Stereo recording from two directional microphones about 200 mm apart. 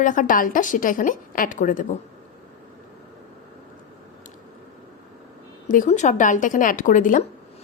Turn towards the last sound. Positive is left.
turn(degrees=40)  # may be behind; listen again after turning